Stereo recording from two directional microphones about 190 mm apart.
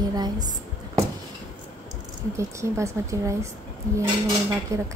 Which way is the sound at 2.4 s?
15° right (ahead or behind).